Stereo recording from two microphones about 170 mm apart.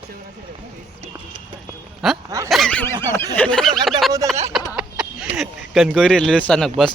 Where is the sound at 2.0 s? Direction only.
Centre (ahead or behind).